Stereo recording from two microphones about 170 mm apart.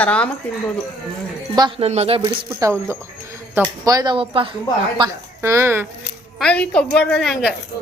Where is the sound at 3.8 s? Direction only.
25° right (ahead or behind).